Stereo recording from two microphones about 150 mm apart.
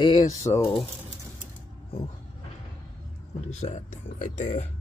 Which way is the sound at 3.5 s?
50° left (ahead or behind).